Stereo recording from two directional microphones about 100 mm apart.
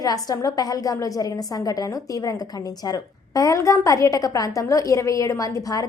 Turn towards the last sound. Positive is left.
turn(degrees=35)  # may be behind; listen again after turning